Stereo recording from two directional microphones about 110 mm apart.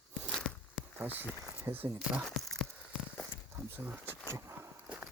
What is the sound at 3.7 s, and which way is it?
Speech, 20° right (ahead or behind).